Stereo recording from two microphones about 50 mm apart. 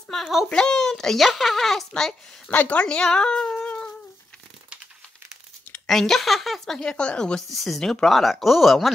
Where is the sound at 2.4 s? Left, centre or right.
Left.